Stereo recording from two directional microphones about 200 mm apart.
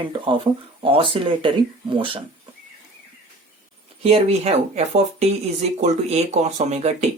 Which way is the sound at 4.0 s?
30° right (ahead or behind).